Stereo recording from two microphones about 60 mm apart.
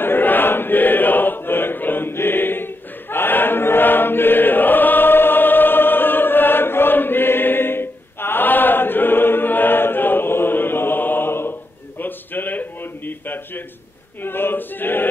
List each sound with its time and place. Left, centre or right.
0.0 s chant: left
12.0 s a sound: left
14.2 s choir: left